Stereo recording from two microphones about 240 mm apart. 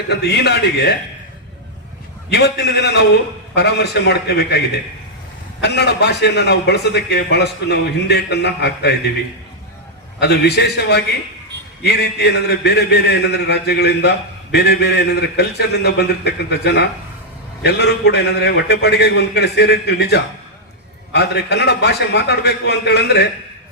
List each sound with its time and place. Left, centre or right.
0.1 s a man's voice: left
2.3 s a man's voice: left
10.2 s a man's voice: left